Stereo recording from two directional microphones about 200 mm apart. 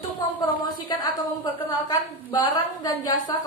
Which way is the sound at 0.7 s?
20° left (ahead or behind).